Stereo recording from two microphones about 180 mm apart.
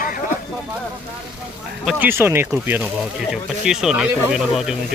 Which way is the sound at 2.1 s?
15° right (ahead or behind).